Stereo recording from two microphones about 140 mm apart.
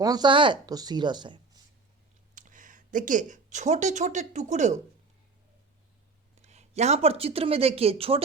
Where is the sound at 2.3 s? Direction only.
70° right (ahead or behind).